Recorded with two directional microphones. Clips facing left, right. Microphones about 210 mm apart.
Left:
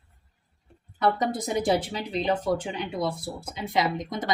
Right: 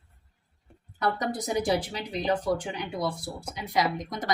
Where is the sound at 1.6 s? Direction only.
25° left (ahead or behind).